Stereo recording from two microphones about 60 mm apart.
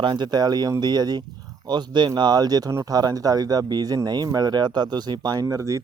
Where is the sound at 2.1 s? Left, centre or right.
Right.